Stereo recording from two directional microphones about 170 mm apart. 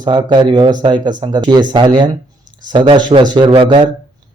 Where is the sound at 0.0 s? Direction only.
25° right (ahead or behind).